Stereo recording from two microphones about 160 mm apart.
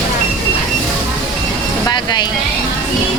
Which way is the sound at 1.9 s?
25° left (ahead or behind).